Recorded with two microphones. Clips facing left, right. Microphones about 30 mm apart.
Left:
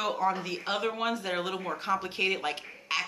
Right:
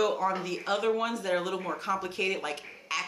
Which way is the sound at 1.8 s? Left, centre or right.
Left.